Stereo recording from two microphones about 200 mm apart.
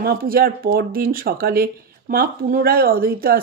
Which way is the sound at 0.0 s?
50° right (ahead or behind).